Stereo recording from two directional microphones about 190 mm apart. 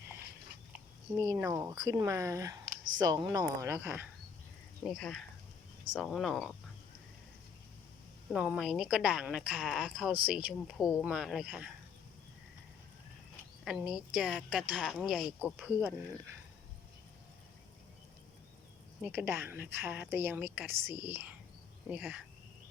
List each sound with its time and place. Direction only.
1.1 s a woman's voice: 15° right (ahead or behind)
4.9 s a woman's voice: centre (ahead or behind)
8.3 s a woman's voice: 5° right (ahead or behind)
13.7 s a woman's voice: 5° right (ahead or behind)
19.0 s a woman's voice: 10° right (ahead or behind)